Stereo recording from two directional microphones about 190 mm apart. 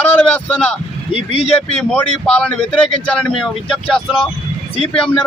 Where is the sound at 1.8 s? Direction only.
5° left (ahead or behind).